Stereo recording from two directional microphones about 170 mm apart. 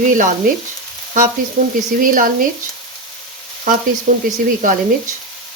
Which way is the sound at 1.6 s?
50° right (ahead or behind).